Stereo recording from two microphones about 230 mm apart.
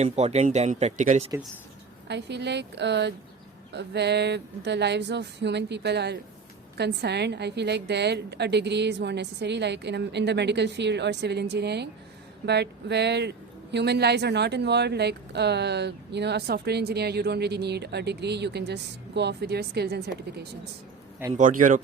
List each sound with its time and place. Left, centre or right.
0.0 s speech: right
2.0 s speech: right